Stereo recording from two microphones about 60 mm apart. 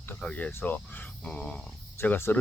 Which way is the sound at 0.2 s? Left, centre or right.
Left.